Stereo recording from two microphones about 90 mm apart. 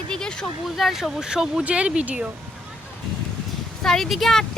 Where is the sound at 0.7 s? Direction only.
5° right (ahead or behind).